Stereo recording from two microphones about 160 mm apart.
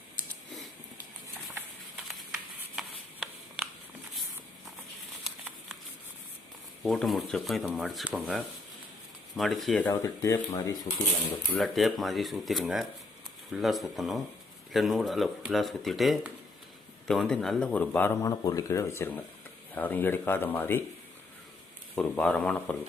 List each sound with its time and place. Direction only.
2.3 s a sound: 5° right (ahead or behind)
6.8 s speech: centre (ahead or behind)
9.9 s speech: 20° left (ahead or behind)
11.5 s speech: centre (ahead or behind)
21.9 s speech: 5° left (ahead or behind)